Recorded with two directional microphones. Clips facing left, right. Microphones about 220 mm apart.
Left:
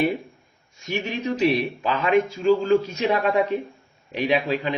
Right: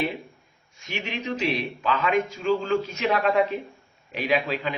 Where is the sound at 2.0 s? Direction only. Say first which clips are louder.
Left 6 dB; 35° left (ahead or behind).